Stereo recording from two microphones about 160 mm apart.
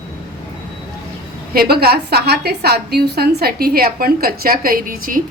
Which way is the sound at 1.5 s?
75° right (ahead or behind).